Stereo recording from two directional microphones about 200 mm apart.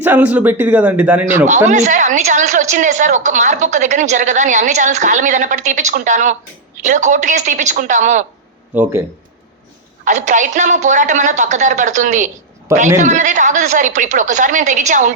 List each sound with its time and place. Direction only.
0.0 s a man's voice: 10° right (ahead or behind)
1.5 s a woman's voice: 35° right (ahead or behind)
8.8 s a man's voice: 15° right (ahead or behind)
10.0 s a woman's voice: 35° right (ahead or behind)